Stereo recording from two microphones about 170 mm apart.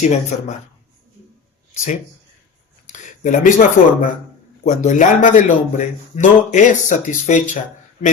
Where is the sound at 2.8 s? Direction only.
45° left (ahead or behind).